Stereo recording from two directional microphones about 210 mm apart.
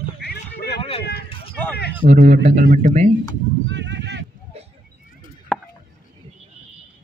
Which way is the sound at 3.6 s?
60° right (ahead or behind).